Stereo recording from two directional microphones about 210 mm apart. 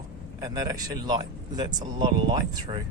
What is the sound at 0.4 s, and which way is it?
Speech, 15° right (ahead or behind).